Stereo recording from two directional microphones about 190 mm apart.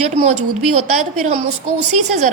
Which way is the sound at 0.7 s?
35° right (ahead or behind).